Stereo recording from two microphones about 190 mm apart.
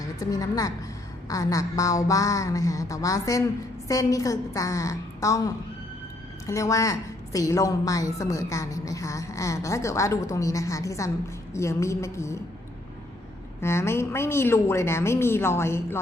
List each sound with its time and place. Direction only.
0.2 s a woman's voice: 20° left (ahead or behind)
13.6 s a woman's voice: 15° left (ahead or behind)